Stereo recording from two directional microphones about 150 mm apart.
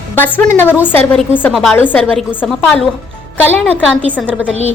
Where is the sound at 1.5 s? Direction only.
Centre (ahead or behind).